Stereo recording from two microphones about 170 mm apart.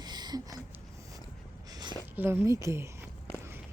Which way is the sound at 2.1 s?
10° right (ahead or behind).